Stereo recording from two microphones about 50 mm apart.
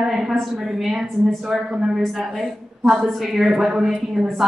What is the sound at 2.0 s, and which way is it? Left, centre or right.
A woman's voice, centre.